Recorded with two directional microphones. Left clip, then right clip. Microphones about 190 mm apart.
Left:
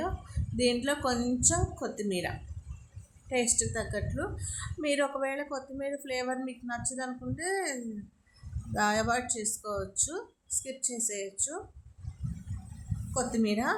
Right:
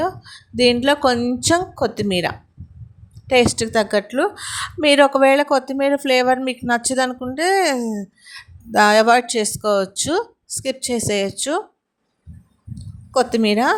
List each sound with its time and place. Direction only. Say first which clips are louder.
0.5 s a woman's voice: right 14 dB; 45° right (ahead or behind)
13.1 s a woman's voice: right 14 dB; 50° right (ahead or behind)